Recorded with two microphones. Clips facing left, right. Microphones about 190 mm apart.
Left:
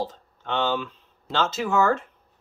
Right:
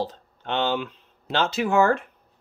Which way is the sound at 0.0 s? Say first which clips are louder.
Right 1 dB; 20° right (ahead or behind).